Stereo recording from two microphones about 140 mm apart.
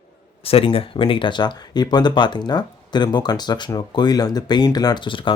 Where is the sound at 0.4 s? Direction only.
40° left (ahead or behind).